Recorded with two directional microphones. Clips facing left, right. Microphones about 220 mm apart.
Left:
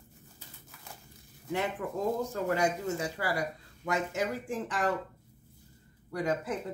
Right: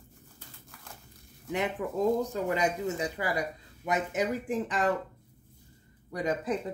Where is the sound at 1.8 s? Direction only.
15° right (ahead or behind).